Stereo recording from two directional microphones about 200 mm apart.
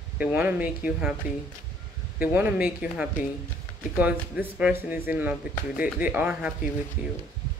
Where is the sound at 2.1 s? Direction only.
10° right (ahead or behind).